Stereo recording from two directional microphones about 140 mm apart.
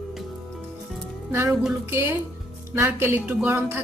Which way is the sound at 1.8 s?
15° right (ahead or behind).